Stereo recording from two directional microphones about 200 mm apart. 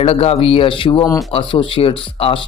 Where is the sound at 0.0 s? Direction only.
30° left (ahead or behind).